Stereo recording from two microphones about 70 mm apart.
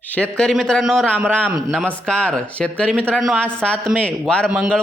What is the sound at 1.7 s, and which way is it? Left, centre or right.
Speech, centre.